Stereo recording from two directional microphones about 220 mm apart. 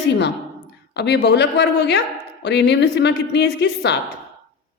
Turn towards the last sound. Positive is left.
turn(degrees=50)  # may be behind; listen again after turning